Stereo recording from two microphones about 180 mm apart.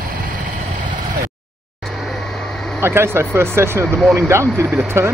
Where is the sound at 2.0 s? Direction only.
5° left (ahead or behind).